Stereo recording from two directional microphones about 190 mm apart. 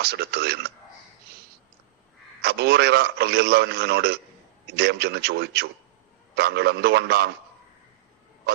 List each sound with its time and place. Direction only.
0.0 s a man's voice: 60° right (ahead or behind)
2.4 s a man's voice: 60° right (ahead or behind)